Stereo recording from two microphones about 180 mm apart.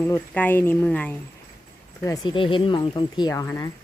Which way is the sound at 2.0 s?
20° left (ahead or behind).